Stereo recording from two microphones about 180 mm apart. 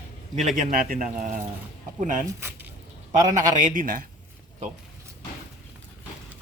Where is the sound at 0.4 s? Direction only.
45° right (ahead or behind).